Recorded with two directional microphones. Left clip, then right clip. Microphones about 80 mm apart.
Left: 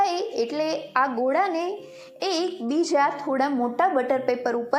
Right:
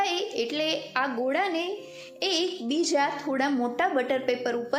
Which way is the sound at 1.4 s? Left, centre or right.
Right.